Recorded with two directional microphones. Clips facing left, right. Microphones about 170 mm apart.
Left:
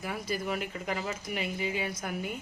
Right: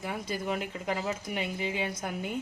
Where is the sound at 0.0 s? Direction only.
25° right (ahead or behind).